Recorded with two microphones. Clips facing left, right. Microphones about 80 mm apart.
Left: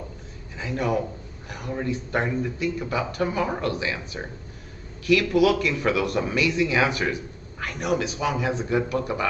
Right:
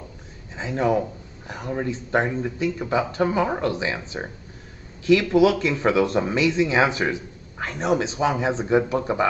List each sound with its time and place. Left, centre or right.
0.6 s a man's voice: right